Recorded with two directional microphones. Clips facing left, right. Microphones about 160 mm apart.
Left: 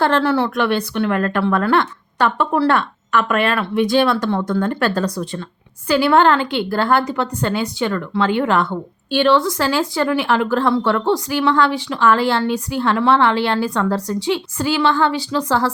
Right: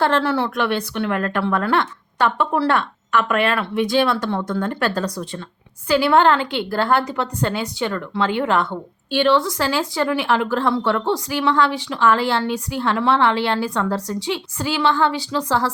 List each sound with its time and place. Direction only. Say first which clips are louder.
0.0 s a woman's voice: left 2 dB; 15° right (ahead or behind)
9.1 s a woman's voice: left 2 dB; 20° right (ahead or behind)